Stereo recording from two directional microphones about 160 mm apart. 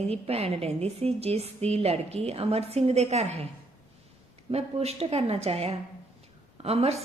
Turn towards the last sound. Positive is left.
turn(degrees=-40)  # may be behind; listen again after turning